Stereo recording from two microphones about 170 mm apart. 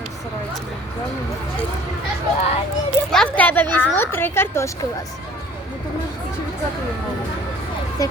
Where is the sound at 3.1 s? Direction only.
5° left (ahead or behind).